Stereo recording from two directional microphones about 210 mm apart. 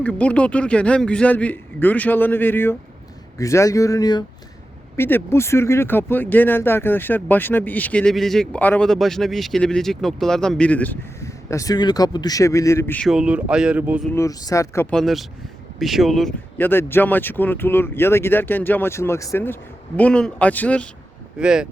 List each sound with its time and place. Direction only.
0.0 s speech: 5° left (ahead or behind)
14.1 s speech: 15° left (ahead or behind)
21.3 s speech: 5° right (ahead or behind)